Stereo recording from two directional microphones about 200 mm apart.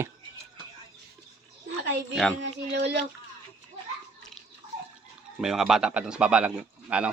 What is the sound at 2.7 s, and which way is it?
Speech, 60° right (ahead or behind).